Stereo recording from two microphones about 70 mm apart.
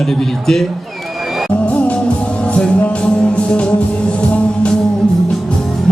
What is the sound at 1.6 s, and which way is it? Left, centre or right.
Music, centre.